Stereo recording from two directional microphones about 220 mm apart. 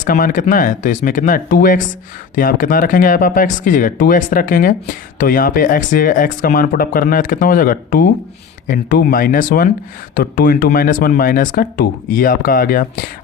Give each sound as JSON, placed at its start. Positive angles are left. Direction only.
{"t": 0.0, "sound": "speech", "side_deg": 40}